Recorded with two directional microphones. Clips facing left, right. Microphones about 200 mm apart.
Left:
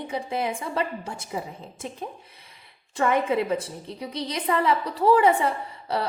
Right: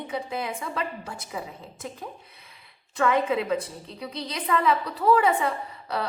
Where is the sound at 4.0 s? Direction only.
30° left (ahead or behind).